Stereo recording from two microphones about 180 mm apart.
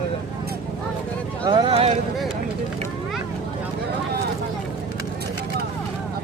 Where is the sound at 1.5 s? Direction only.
25° right (ahead or behind).